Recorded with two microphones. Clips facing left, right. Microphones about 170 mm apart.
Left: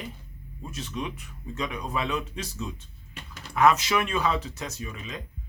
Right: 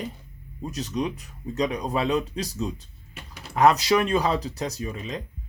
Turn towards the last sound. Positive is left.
turn(degrees=-35)  # may be behind; listen again after turning